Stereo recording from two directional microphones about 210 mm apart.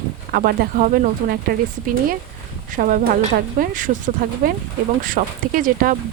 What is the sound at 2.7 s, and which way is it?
Speech, 40° right (ahead or behind).